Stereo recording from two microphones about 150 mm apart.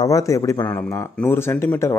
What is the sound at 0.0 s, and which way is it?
Speech, 20° left (ahead or behind).